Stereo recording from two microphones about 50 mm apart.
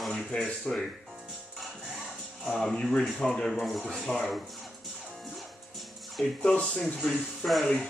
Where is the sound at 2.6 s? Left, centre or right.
Centre.